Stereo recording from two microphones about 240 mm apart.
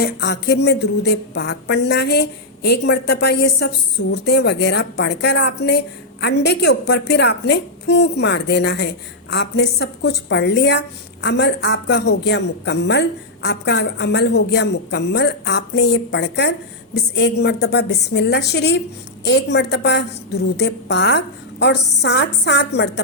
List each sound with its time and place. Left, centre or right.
0.0 s a woman's voice: left